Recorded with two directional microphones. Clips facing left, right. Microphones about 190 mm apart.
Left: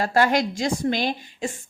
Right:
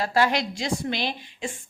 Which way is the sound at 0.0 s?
45° left (ahead or behind).